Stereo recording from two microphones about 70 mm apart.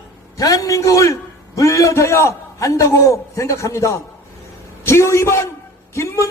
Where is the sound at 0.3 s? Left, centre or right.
Left.